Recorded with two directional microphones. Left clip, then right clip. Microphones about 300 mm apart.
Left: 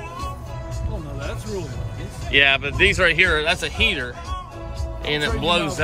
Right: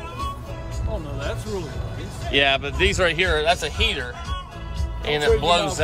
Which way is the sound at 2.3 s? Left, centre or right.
Centre.